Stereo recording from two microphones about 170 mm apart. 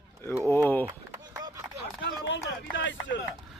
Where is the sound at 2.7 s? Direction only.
90° left.